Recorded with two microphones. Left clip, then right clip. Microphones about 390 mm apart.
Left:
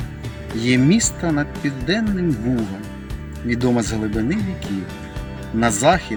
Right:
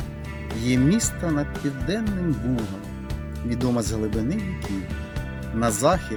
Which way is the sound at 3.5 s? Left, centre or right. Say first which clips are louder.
Left 6 dB; right.